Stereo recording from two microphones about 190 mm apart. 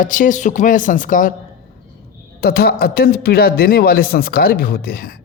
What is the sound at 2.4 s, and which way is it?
A man's voice, 55° left (ahead or behind).